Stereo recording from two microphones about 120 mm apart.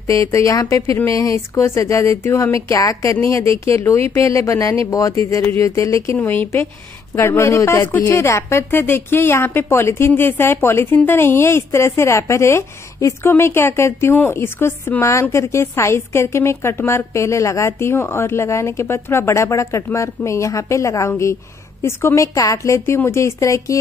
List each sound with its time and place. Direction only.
0.0 s a woman's voice: 25° left (ahead or behind)
6.1 s a woman's voice: 15° left (ahead or behind)